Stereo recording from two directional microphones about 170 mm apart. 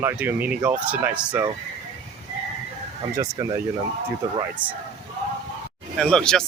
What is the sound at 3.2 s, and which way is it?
Speech, 20° right (ahead or behind).